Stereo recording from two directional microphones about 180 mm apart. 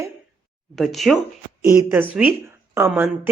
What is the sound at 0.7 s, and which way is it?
Speech, centre (ahead or behind).